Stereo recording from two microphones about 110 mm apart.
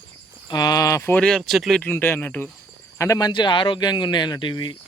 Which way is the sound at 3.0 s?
30° left (ahead or behind).